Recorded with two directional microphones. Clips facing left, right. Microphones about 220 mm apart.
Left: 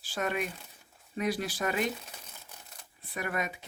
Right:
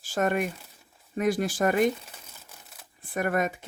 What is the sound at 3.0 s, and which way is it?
Speech, 50° right (ahead or behind).